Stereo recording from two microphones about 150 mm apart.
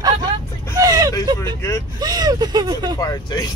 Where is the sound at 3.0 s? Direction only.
25° left (ahead or behind).